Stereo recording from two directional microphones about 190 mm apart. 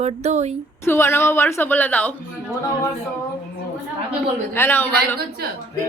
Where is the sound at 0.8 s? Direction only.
10° left (ahead or behind).